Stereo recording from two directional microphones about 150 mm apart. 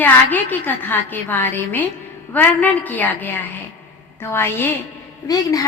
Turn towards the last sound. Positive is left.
turn(degrees=25)  # may be behind; listen again after turning